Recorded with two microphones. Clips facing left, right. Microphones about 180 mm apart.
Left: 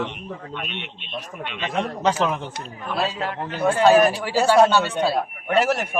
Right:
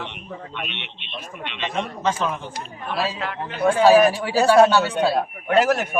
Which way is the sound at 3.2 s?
35° left (ahead or behind).